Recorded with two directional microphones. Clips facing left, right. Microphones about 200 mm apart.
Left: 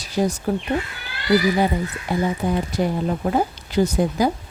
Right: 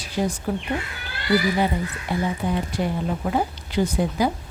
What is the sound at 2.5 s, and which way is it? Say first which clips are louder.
A woman's voice: left 3 dB; 40° left (ahead or behind).